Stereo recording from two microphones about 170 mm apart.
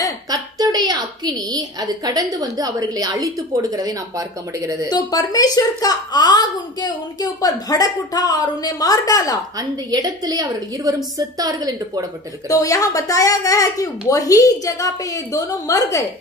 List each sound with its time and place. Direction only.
0.3 s a woman's voice: 25° right (ahead or behind)
4.8 s a woman's voice: 25° left (ahead or behind)
9.6 s a woman's voice: 20° right (ahead or behind)
12.4 s a woman's voice: 20° left (ahead or behind)